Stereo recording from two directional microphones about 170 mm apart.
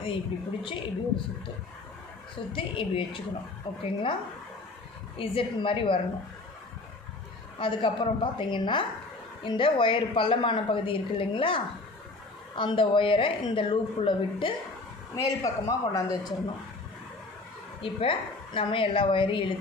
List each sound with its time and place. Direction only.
0.0 s speech: 30° left (ahead or behind)
2.5 s speech: 30° left (ahead or behind)
5.1 s speech: 30° left (ahead or behind)
7.5 s a woman's voice: 30° left (ahead or behind)
15.1 s a woman's voice: 20° left (ahead or behind)
17.8 s speech: 30° left (ahead or behind)